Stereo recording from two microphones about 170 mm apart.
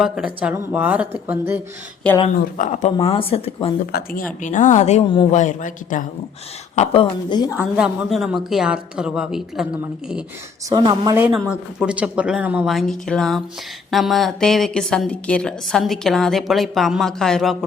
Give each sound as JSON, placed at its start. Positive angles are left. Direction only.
{"t": 0.0, "sound": "speech", "side_deg": -5}
{"t": 2.6, "sound": "a woman's voice", "side_deg": 45}
{"t": 3.1, "sound": "speech", "side_deg": 35}
{"t": 3.9, "sound": "a woman's voice", "side_deg": 55}
{"t": 6.7, "sound": "a woman's voice", "side_deg": 35}
{"t": 7.6, "sound": "a woman's voice", "side_deg": -5}
{"t": 10.7, "sound": "speech", "side_deg": -25}
{"t": 11.4, "sound": "a woman's voice", "side_deg": -5}